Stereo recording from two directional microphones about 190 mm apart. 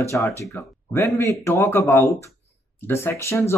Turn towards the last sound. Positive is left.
turn(degrees=15)  # may be behind; listen again after turning